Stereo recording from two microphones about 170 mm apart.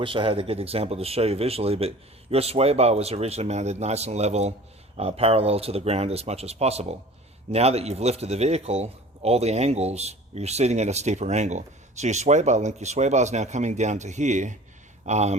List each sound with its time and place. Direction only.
0.0 s a man's voice: 30° right (ahead or behind)